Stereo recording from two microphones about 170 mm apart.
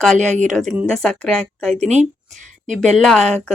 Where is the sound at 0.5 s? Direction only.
Centre (ahead or behind).